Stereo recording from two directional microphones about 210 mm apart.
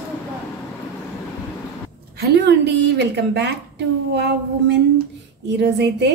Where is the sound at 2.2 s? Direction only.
55° right (ahead or behind).